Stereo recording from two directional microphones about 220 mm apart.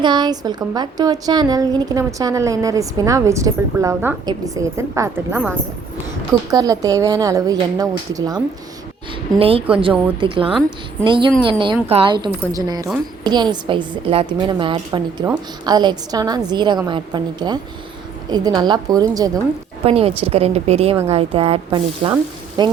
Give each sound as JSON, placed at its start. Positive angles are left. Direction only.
{"t": 0.0, "sound": "a woman's voice", "side_deg": -20}
{"t": 9.4, "sound": "a woman's voice", "side_deg": -25}
{"t": 19.8, "sound": "a woman's voice", "side_deg": -25}